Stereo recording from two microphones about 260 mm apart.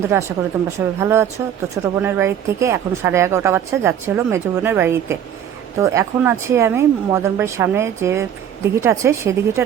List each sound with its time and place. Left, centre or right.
0.0 s speech: centre